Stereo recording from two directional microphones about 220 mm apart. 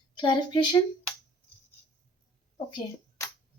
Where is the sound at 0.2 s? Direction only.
20° left (ahead or behind).